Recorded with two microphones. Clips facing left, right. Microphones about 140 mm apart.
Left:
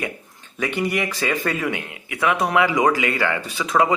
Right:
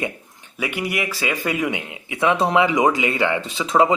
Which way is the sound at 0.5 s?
10° right (ahead or behind).